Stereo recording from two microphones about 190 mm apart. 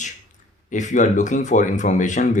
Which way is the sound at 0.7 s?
40° left (ahead or behind).